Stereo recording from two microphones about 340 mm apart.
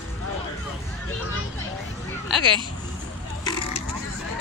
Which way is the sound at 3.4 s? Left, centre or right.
Centre.